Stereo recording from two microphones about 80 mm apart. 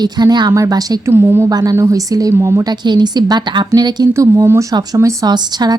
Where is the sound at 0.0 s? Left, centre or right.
Right.